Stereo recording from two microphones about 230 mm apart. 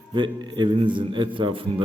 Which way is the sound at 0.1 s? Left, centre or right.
Centre.